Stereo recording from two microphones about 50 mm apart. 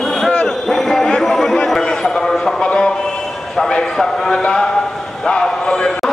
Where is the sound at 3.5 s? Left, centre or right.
Centre.